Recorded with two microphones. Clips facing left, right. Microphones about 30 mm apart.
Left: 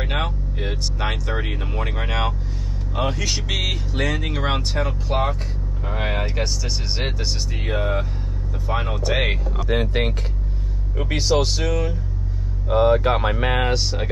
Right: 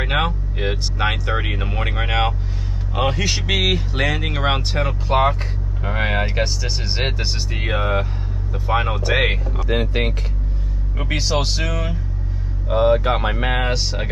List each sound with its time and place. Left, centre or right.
0.0 s speech: right
11.1 s speech: centre
12.6 s speech: centre
13.2 s speech: right
13.6 s speech: centre